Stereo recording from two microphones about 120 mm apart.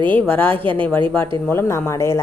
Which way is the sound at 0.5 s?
45° right (ahead or behind).